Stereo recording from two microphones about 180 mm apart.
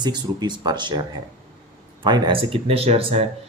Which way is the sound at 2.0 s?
25° right (ahead or behind).